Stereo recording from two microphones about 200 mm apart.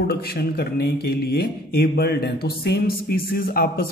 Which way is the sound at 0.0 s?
50° left (ahead or behind).